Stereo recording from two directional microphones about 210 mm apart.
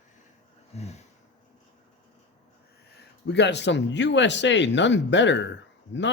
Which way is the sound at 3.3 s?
55° left (ahead or behind).